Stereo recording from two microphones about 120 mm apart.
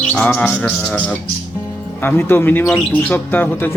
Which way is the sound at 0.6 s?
10° left (ahead or behind).